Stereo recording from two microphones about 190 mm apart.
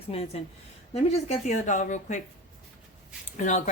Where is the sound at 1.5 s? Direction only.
40° left (ahead or behind).